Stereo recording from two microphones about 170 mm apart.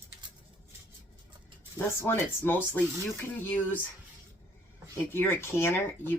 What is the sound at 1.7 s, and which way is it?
Speech, 15° left (ahead or behind).